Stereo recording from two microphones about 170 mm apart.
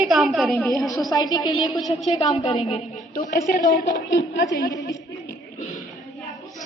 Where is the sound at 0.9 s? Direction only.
20° left (ahead or behind).